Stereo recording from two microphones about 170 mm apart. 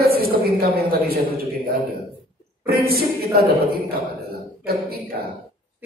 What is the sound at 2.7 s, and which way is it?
A man's voice, 65° right (ahead or behind).